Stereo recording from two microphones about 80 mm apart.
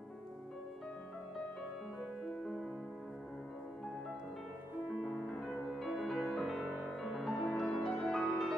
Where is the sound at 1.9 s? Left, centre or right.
Centre.